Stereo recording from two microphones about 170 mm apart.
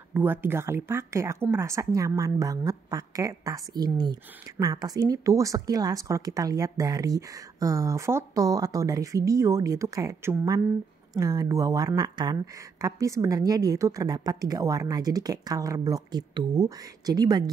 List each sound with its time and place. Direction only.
0.1 s a woman's voice: 10° right (ahead or behind)